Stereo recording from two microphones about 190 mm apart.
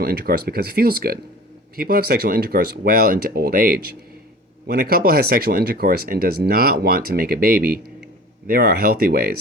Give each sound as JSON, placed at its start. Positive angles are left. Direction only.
{"t": 0.0, "sound": "speech", "side_deg": -55}